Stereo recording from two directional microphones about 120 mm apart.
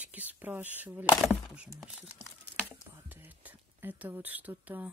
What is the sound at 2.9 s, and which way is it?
Whispering, 15° right (ahead or behind).